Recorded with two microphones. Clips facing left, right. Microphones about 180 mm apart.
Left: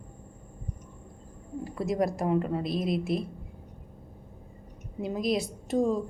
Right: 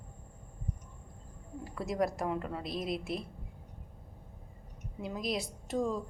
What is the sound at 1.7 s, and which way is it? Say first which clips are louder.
A woman's voice: left 4 dB; 20° left (ahead or behind).